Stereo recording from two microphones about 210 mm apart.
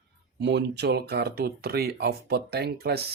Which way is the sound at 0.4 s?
55° right (ahead or behind).